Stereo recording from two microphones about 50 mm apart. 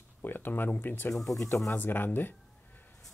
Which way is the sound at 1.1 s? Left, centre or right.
Centre.